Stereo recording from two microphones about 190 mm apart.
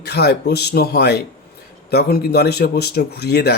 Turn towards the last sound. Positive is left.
turn(degrees=60)  # may be behind; listen again after turning